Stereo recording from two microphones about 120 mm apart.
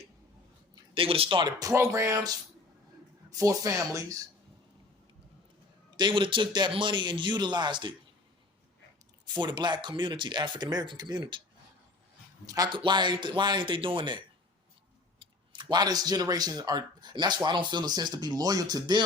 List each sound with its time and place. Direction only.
0.9 s speech: 50° right (ahead or behind); by 4.0 s 30° right (ahead or behind)
6.0 s speech: 40° right (ahead or behind)
9.2 s speech: 40° right (ahead or behind)
12.5 s speech: 35° right (ahead or behind)